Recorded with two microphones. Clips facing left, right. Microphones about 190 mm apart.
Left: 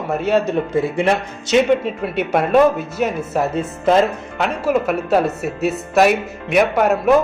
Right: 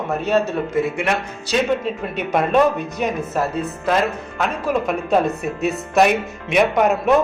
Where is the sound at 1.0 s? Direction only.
30° left (ahead or behind).